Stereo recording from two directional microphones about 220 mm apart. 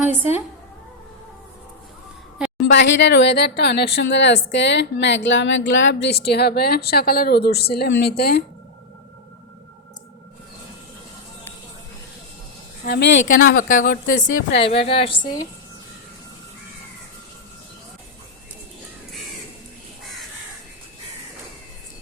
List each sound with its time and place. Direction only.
2.6 s speech: 55° left (ahead or behind)
12.8 s a woman's voice: 50° left (ahead or behind); by 15.4 s 20° left (ahead or behind)